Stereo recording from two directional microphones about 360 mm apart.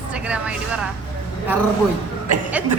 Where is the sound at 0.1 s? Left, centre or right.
Centre.